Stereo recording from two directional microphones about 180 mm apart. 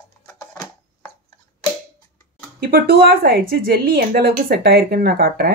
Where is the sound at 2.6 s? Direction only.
60° right (ahead or behind).